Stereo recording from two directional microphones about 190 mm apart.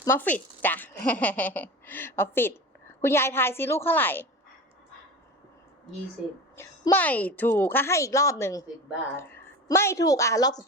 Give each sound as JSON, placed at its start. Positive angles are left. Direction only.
{"t": 0.0, "sound": "a woman's voice", "side_deg": 10}
{"t": 6.6, "sound": "a woman's voice", "side_deg": 10}